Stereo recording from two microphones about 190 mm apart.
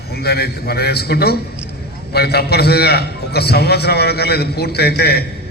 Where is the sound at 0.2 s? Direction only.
55° left (ahead or behind).